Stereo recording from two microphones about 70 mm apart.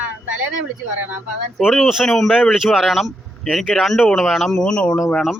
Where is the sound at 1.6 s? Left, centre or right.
Centre.